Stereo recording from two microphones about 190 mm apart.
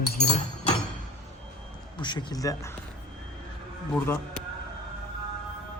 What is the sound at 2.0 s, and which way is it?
Speech, 25° left (ahead or behind).